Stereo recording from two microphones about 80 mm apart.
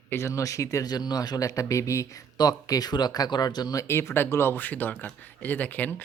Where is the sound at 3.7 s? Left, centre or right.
Left.